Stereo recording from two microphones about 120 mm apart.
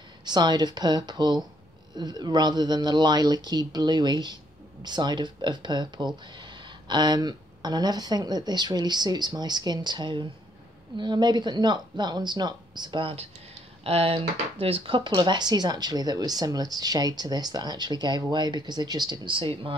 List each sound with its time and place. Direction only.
0.2 s speech: 35° right (ahead or behind)
13.8 s speech: 50° right (ahead or behind)